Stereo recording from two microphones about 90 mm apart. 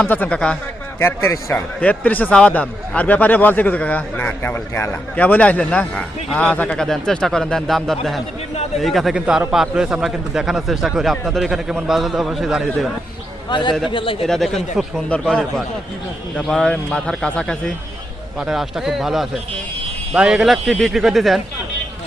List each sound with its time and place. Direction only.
0.0 s speech: 20° left (ahead or behind)
0.9 s a man's voice: 30° left (ahead or behind)
1.8 s a man's voice: 15° left (ahead or behind); by 9.1 s centre (ahead or behind)
9.1 s a man's voice: 10° right (ahead or behind)
13.5 s a man's voice: 60° left (ahead or behind)
13.9 s speech: 75° left (ahead or behind)
14.3 s a man's voice: 5° left (ahead or behind)
18.3 s a man's voice: 5° right (ahead or behind)